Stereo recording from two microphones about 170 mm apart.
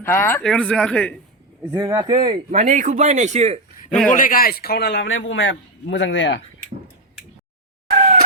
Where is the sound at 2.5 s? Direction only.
45° right (ahead or behind).